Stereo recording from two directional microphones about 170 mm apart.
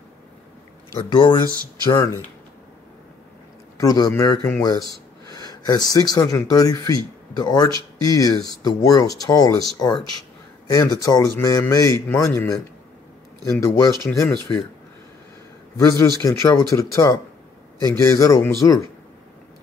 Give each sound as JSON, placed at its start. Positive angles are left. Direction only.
{"t": 0.9, "sound": "speech", "side_deg": 25}
{"t": 3.8, "sound": "speech", "side_deg": 25}
{"t": 4.4, "sound": "a man's voice", "side_deg": 5}
{"t": 5.3, "sound": "speech", "side_deg": 25}
{"t": 13.6, "sound": "a man's voice", "side_deg": 15}
{"t": 15.8, "sound": "a man's voice", "side_deg": 15}